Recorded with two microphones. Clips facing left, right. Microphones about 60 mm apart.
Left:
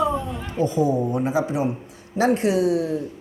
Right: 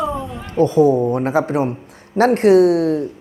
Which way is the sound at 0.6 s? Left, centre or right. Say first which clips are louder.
Right 8 dB; right.